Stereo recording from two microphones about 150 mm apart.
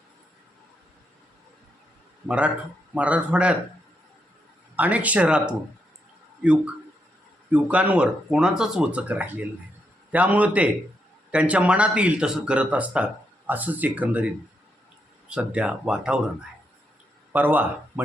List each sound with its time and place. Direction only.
2.2 s speech: 10° right (ahead or behind)
4.8 s speech: 10° right (ahead or behind)
7.5 s speech: 10° right (ahead or behind)
15.3 s speech: 5° right (ahead or behind)
17.3 s speech: 10° right (ahead or behind)